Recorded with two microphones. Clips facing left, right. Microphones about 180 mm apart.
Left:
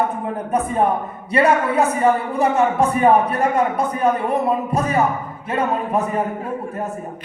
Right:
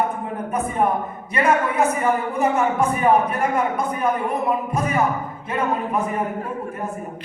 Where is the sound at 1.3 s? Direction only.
35° left (ahead or behind).